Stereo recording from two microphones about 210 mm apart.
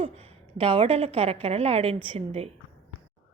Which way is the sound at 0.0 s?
30° right (ahead or behind).